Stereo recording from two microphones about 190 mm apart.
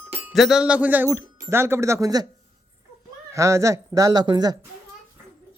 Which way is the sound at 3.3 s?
15° right (ahead or behind).